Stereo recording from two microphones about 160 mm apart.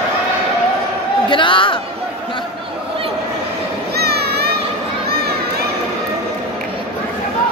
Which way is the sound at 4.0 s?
90° right.